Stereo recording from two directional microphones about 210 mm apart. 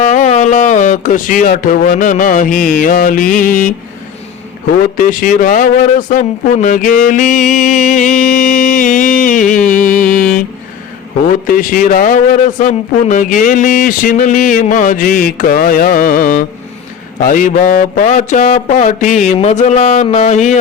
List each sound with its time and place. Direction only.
0.0 s speech: 35° left (ahead or behind)
4.9 s a man's voice: 40° left (ahead or behind)
10.2 s a sound: 40° left (ahead or behind)
11.3 s a man's voice: 40° left (ahead or behind)